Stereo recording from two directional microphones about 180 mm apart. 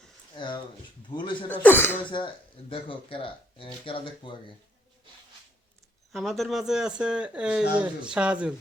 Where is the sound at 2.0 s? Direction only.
25° left (ahead or behind).